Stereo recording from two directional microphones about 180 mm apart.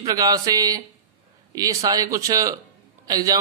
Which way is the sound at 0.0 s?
20° right (ahead or behind).